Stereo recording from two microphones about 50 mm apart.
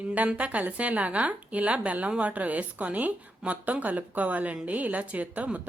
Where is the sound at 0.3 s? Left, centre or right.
Right.